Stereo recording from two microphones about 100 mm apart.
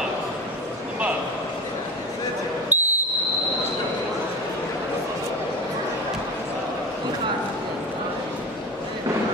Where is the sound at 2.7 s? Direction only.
20° right (ahead or behind).